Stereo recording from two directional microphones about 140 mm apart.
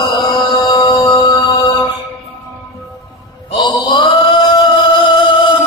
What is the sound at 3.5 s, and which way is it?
Mantra, 35° left (ahead or behind).